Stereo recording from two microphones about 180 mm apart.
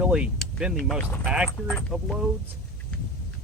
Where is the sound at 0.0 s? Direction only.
5° right (ahead or behind).